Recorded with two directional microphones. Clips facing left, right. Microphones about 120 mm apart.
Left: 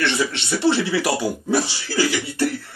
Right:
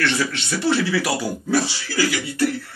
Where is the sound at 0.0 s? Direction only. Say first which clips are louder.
Even; 20° left (ahead or behind).